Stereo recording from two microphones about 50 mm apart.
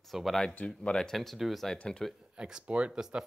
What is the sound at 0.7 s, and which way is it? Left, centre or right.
Speech, centre.